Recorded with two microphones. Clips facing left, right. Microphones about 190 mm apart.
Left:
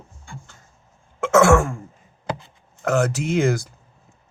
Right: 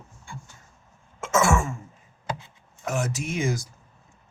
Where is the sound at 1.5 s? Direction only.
60° left (ahead or behind).